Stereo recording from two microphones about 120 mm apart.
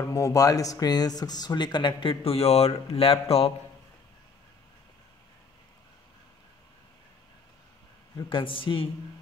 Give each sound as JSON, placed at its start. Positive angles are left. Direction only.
{"t": 0.0, "sound": "speech", "side_deg": 30}
{"t": 8.3, "sound": "speech", "side_deg": 45}